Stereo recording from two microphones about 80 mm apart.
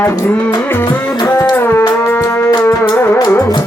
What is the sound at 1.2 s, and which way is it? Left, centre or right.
Music, left.